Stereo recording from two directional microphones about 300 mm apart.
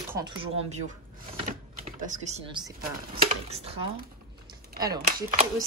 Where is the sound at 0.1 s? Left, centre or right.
Centre.